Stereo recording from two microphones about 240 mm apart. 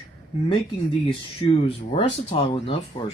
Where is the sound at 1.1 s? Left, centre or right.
Left.